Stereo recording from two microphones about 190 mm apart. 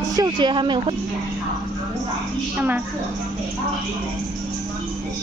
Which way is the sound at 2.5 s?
10° right (ahead or behind).